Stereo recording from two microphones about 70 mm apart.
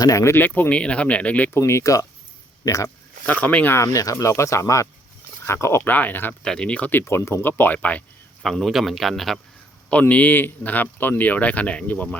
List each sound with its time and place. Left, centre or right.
0.0 s speech: left
0.3 s speech: left
1.5 s speech: left
3.2 s speech: left
3.8 s speech: left
5.8 s speech: left
6.4 s speech: centre
7.0 s speech: left
7.4 s speech: left
8.4 s a man's voice: centre
9.9 s speech: centre